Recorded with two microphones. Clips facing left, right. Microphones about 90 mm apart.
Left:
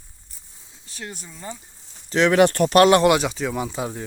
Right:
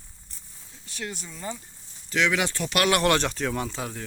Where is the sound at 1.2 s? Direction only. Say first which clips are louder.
Right 1 dB; 10° left (ahead or behind).